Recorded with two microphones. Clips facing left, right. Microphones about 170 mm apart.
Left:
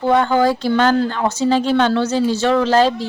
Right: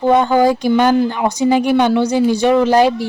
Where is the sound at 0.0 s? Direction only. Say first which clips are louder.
Right 3 dB; 15° right (ahead or behind).